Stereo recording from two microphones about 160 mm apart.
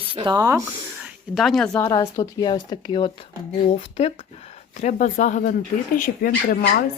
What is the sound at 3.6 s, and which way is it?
Speech, 40° left (ahead or behind).